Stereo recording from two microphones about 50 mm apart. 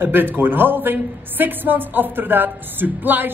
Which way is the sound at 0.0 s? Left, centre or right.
Right.